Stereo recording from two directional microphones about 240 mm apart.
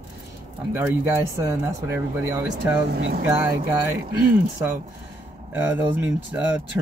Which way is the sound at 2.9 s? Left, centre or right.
Right.